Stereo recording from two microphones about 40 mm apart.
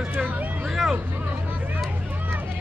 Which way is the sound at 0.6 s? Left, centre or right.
Centre.